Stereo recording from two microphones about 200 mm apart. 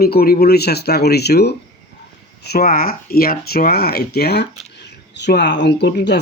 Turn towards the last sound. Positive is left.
turn(degrees=55)  # may be behind; listen again after turning